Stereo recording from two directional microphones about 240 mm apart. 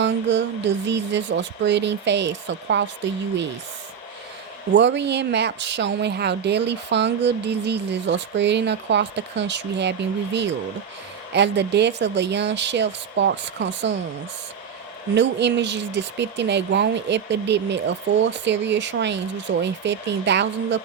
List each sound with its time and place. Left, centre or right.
0.0 s a woman's voice: right
4.7 s a woman's voice: right
15.1 s a woman's voice: right